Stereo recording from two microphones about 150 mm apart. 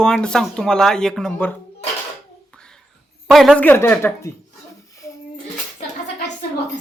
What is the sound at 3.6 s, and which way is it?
Speech, 15° left (ahead or behind).